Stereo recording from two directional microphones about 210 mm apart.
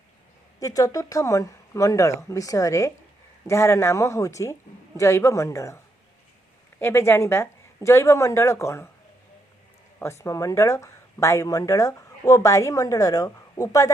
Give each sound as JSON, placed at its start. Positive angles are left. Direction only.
{"t": 0.6, "sound": "speech", "side_deg": 15}
{"t": 10.0, "sound": "speech", "side_deg": 15}